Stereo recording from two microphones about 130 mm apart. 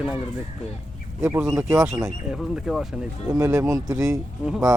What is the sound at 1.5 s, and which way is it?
Speech, 25° right (ahead or behind).